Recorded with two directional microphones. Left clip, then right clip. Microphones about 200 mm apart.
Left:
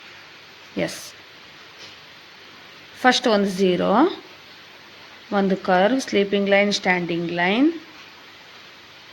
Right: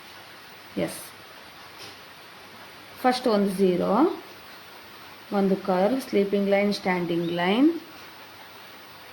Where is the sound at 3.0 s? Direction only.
40° left (ahead or behind).